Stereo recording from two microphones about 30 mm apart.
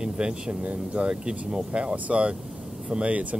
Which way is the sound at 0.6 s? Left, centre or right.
Right.